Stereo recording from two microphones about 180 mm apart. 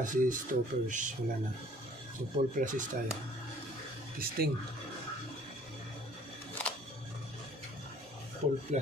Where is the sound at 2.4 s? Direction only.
45° right (ahead or behind).